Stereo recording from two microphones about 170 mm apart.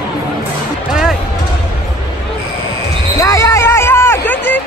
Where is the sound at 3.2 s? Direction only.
20° left (ahead or behind).